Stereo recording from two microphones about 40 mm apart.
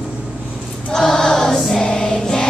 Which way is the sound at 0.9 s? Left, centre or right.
Centre.